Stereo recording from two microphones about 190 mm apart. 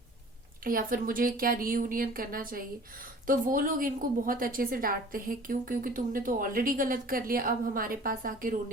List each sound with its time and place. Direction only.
0.6 s a woman's voice: 50° right (ahead or behind)